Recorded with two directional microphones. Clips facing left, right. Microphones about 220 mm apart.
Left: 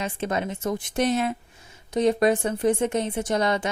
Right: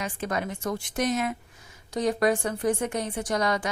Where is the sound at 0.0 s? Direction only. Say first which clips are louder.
Left 3 dB; 25° left (ahead or behind).